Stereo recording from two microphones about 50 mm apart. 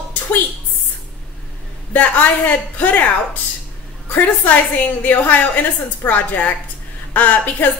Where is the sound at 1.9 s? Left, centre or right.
Left.